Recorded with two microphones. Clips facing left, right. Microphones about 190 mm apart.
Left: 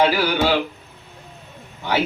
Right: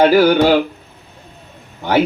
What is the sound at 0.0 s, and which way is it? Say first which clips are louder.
Speech: right 8 dB; 50° right (ahead or behind).